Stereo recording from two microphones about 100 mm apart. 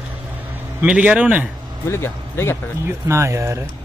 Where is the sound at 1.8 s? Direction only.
25° left (ahead or behind).